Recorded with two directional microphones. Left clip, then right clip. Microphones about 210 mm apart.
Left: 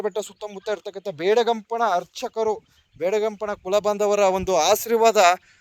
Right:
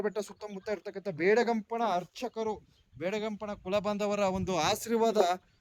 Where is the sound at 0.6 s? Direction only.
50° left (ahead or behind).